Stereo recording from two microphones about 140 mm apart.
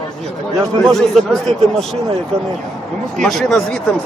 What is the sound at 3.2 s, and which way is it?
Speech, 5° left (ahead or behind).